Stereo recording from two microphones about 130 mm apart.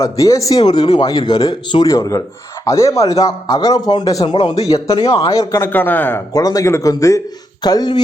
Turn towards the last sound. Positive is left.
turn(degrees=30)  # may be behind; listen again after turning